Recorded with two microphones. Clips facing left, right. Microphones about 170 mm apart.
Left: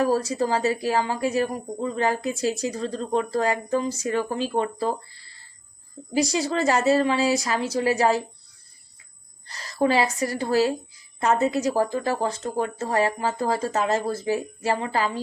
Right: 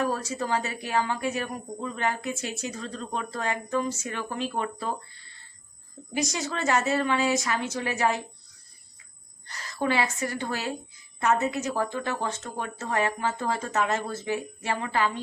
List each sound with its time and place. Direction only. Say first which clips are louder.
0.0 s speech: left 6 dB; 35° left (ahead or behind)
9.5 s a woman's voice: left 6 dB; 35° left (ahead or behind)